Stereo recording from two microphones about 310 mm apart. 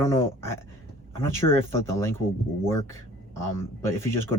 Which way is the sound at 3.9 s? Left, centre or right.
Centre.